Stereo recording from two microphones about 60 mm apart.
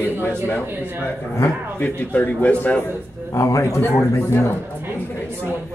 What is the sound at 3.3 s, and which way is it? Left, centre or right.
Speech, left.